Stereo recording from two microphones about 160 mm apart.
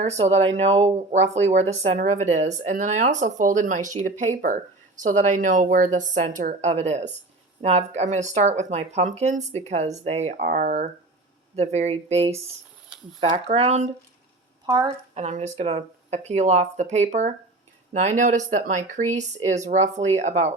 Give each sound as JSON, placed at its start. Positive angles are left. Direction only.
{"t": 0.0, "sound": "speech", "side_deg": -45}